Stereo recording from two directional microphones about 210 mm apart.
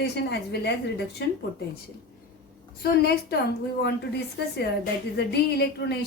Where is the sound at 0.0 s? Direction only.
50° left (ahead or behind).